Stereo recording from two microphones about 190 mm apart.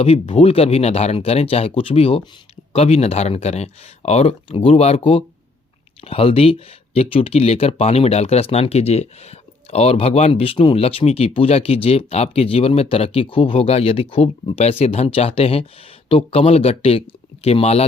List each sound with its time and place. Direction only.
0.0 s speech: 35° left (ahead or behind)